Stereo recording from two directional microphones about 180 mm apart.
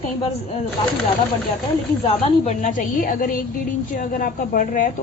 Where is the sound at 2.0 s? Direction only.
35° left (ahead or behind).